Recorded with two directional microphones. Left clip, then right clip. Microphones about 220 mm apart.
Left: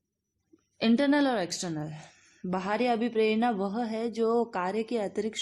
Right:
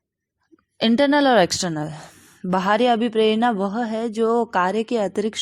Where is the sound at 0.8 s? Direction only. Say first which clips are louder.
Right 8 dB; 25° right (ahead or behind).